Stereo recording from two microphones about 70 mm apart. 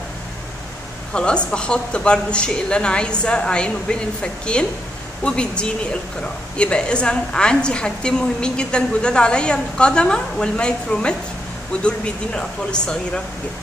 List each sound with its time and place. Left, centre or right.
1.1 s a woman's voice: centre